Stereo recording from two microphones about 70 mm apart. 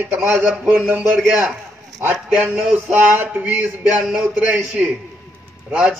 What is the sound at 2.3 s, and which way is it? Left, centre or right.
Speech, centre.